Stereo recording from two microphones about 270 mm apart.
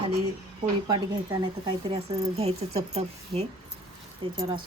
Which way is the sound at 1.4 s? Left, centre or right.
Centre.